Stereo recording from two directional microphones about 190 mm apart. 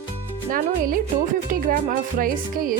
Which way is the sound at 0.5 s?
50° right (ahead or behind).